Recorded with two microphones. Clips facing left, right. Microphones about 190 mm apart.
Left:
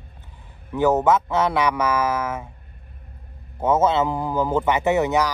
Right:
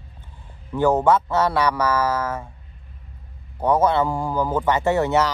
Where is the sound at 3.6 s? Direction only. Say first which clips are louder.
Even; 20° left (ahead or behind).